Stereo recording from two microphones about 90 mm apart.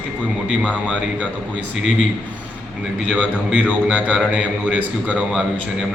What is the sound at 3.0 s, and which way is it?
A man's voice, 15° right (ahead or behind).